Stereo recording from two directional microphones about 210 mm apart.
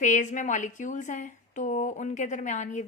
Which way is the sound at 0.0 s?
35° left (ahead or behind).